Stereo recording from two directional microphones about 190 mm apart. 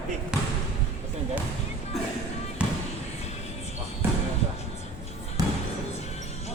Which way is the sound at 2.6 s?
5° right (ahead or behind).